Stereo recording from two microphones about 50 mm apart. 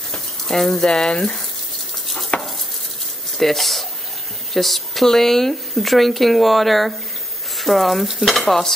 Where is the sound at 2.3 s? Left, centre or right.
Left.